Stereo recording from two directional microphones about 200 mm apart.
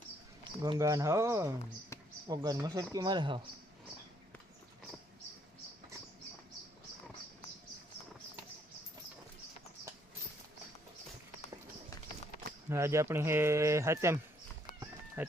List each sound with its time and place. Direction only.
0.4 s speech: 20° right (ahead or behind)
12.6 s speech: 15° right (ahead or behind)
14.8 s horse: 10° right (ahead or behind)